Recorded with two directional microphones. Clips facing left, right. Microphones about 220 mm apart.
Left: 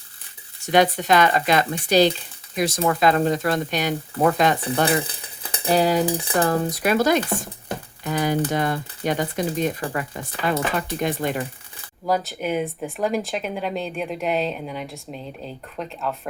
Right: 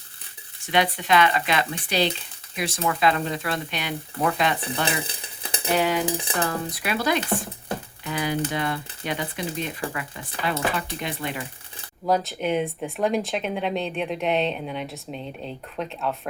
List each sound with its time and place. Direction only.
0.7 s speech: 45° left (ahead or behind)
5.7 s cutlery: 35° left (ahead or behind)
8.0 s speech: 45° left (ahead or behind)
12.0 s speech: centre (ahead or behind)